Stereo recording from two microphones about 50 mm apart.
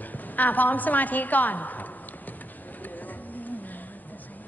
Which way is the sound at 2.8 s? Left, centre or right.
Left.